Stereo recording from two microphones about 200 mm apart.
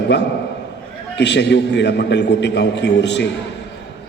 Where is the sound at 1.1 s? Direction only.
60° left (ahead or behind).